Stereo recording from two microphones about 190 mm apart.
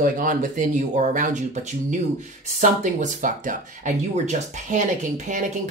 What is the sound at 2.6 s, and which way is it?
Speech, 40° right (ahead or behind).